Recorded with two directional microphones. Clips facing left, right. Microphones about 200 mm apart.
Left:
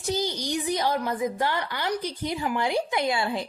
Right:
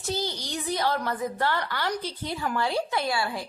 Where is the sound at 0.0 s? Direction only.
15° left (ahead or behind).